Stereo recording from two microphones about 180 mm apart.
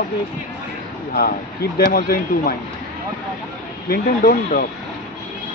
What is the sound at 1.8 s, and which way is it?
Speech, 50° left (ahead or behind).